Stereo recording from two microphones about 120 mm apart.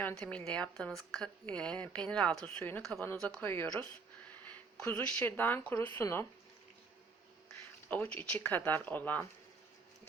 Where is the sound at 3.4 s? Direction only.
20° left (ahead or behind).